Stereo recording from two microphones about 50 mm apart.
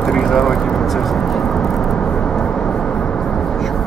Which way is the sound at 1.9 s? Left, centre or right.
Centre.